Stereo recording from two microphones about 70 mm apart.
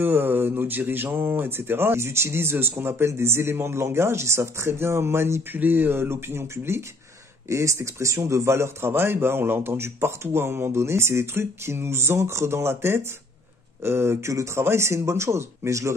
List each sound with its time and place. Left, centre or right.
0.0 s a man's voice: right